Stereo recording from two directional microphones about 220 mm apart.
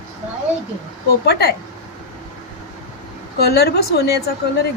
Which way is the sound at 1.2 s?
45° left (ahead or behind).